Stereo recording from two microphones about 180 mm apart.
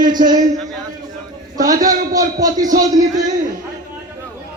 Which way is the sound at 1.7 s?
50° right (ahead or behind).